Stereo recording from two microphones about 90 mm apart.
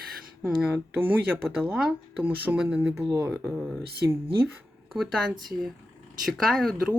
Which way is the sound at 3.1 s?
30° right (ahead or behind).